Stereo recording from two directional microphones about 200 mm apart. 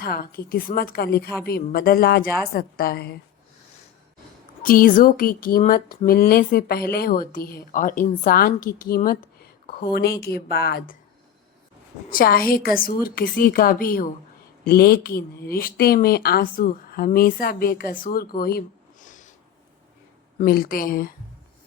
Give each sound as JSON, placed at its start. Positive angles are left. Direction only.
{"t": 0.0, "sound": "speech", "side_deg": 50}
{"t": 4.6, "sound": "speech", "side_deg": 45}
{"t": 9.0, "sound": "a sound", "side_deg": 50}
{"t": 10.2, "sound": "speech", "side_deg": 50}
{"t": 12.0, "sound": "speech", "side_deg": 45}
{"t": 20.4, "sound": "speech", "side_deg": 45}